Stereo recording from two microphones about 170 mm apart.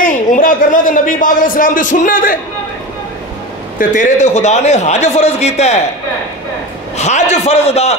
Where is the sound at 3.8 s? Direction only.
45° left (ahead or behind).